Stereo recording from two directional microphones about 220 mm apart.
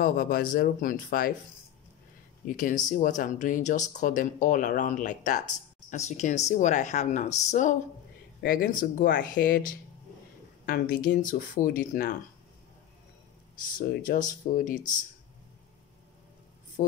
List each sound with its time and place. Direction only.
0.0 s speech: 40° left (ahead or behind)
2.4 s speech: 35° left (ahead or behind)
13.7 s speech: 35° left (ahead or behind)